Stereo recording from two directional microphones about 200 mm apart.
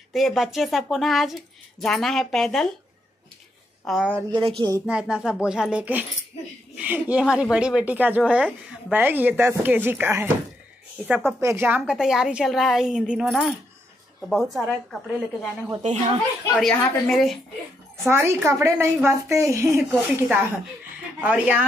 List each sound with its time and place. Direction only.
0.1 s a woman's voice: centre (ahead or behind)
3.8 s a woman's voice: 5° right (ahead or behind)
4.3 s speech: 25° right (ahead or behind)
4.8 s a woman's voice: 5° right (ahead or behind)
11.1 s a woman's voice: centre (ahead or behind)
11.4 s a woman's voice: 10° right (ahead or behind)
15.8 s speech: 35° right (ahead or behind)
16.5 s a woman's voice: centre (ahead or behind)
18.1 s a woman's voice: 15° right (ahead or behind)